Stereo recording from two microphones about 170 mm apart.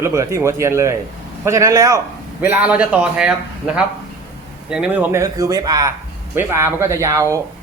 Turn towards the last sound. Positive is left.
turn(degrees=-20)  # may be behind; listen again after turning